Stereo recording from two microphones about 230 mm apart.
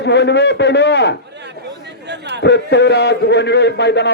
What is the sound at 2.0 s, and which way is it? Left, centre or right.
Speech, right.